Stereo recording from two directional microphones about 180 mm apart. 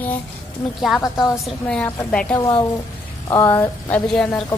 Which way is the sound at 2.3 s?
20° left (ahead or behind).